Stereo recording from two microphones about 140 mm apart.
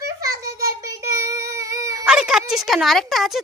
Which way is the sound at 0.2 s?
25° right (ahead or behind).